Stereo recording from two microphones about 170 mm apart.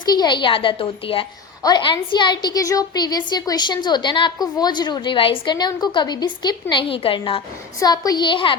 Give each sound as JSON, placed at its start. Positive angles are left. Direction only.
{"t": 0.0, "sound": "a woman's voice", "side_deg": 25}
{"t": 7.8, "sound": "a woman's voice", "side_deg": 20}